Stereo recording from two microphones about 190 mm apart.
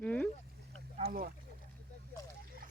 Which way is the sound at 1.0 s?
50° right (ahead or behind).